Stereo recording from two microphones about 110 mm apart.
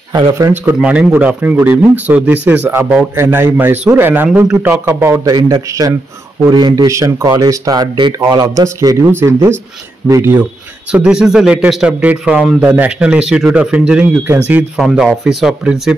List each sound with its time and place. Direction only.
0.7 s a man's voice: 10° right (ahead or behind)
5.2 s a man's voice: 35° right (ahead or behind)
10.9 s a man's voice: 10° right (ahead or behind)